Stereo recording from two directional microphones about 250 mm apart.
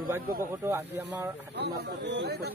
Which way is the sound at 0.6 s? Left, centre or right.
Centre.